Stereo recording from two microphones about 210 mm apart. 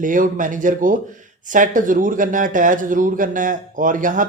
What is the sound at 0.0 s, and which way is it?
Speech, 40° right (ahead or behind).